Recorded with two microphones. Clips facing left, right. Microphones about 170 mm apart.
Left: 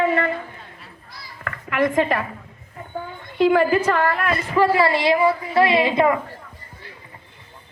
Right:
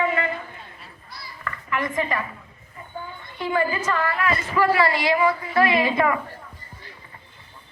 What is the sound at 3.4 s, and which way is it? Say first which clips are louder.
Speech: left 8 dB; 75° left (ahead or behind).